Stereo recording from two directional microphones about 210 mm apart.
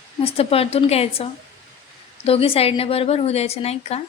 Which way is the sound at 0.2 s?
30° left (ahead or behind).